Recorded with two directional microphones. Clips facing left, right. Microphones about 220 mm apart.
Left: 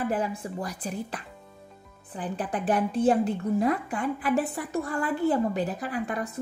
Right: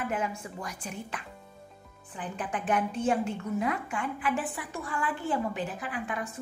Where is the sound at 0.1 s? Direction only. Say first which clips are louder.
Left 4 dB; 35° left (ahead or behind).